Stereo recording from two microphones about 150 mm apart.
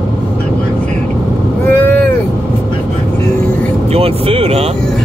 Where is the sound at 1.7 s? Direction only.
15° left (ahead or behind).